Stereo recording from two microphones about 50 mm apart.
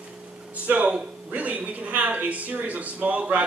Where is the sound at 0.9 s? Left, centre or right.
Right.